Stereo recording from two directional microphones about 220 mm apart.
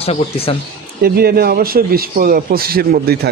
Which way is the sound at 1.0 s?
45° right (ahead or behind).